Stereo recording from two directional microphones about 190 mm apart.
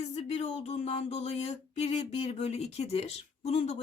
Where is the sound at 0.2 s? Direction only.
35° left (ahead or behind).